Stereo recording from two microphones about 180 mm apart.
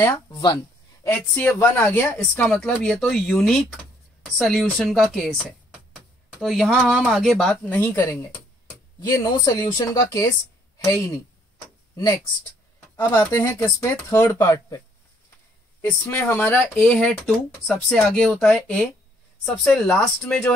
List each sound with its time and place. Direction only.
0.0 s speech: 20° left (ahead or behind)
1.0 s speech: 10° left (ahead or behind)
7.8 s speech: 15° left (ahead or behind)
11.5 s tick-tock: 20° left (ahead or behind)
13.1 s speech: 10° left (ahead or behind)
15.8 s speech: 10° left (ahead or behind)